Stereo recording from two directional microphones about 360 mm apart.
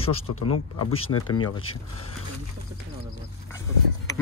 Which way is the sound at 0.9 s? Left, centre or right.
Left.